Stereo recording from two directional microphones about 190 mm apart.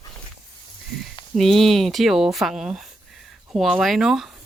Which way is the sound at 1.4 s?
Centre (ahead or behind).